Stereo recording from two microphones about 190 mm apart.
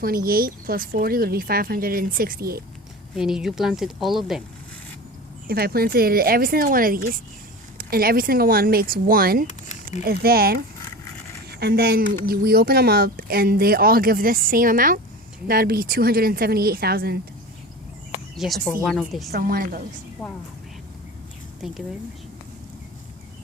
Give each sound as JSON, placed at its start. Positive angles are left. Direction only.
{"t": 0.0, "sound": "speech", "side_deg": -50}
{"t": 3.2, "sound": "speech", "side_deg": -5}
{"t": 5.5, "sound": "speech", "side_deg": -55}
{"t": 11.6, "sound": "speech", "side_deg": -55}
{"t": 18.3, "sound": "speech", "side_deg": 0}
{"t": 19.3, "sound": "speech", "side_deg": -50}
{"t": 20.2, "sound": "speech", "side_deg": 0}
{"t": 21.6, "sound": "speech", "side_deg": 0}